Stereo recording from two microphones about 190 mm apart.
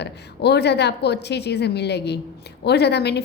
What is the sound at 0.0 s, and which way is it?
A woman's voice, 60° left (ahead or behind).